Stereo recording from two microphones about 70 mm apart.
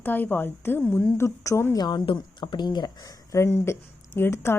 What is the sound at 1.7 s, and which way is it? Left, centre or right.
Speech, left.